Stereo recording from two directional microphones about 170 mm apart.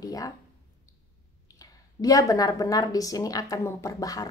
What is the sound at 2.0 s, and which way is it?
Speech, 20° left (ahead or behind).